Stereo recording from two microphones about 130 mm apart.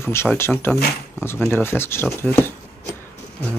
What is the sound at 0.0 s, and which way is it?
Speech, 20° left (ahead or behind).